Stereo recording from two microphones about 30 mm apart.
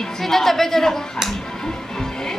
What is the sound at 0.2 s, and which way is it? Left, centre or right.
Speech, centre.